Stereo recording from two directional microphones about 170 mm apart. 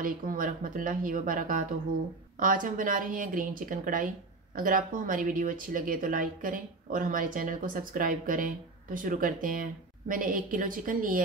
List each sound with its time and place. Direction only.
0.0 s speech: 50° right (ahead or behind)